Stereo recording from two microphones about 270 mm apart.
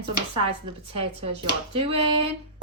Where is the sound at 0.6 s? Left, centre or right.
Right.